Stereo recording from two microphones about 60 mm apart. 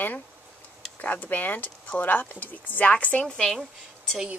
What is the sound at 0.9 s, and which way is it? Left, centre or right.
Speech, left.